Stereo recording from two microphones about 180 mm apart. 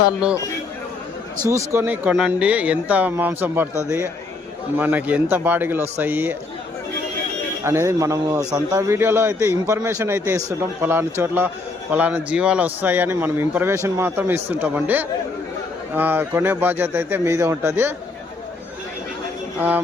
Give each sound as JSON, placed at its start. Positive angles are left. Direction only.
{"t": 1.5, "sound": "a man's voice", "side_deg": -15}
{"t": 7.6, "sound": "a man's voice", "side_deg": -15}
{"t": 19.5, "sound": "speech", "side_deg": -10}